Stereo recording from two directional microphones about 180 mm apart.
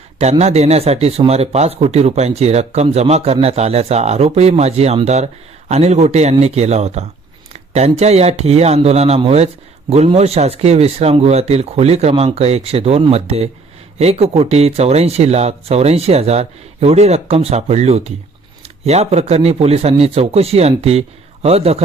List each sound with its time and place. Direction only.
0.2 s speech: 35° right (ahead or behind)